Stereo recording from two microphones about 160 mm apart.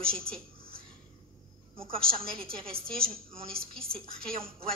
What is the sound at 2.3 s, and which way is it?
A woman's voice, 35° right (ahead or behind).